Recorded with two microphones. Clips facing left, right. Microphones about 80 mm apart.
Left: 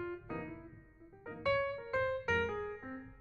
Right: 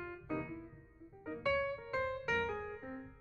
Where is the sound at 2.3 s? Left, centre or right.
Left.